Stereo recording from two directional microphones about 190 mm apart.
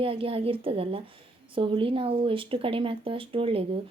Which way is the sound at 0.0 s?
30° right (ahead or behind).